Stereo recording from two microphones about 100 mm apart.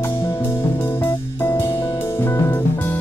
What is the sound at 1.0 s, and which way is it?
Music, 25° left (ahead or behind).